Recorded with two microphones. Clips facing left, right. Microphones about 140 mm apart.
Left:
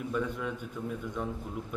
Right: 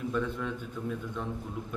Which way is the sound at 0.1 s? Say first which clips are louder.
Left 1 dB; 10° left (ahead or behind).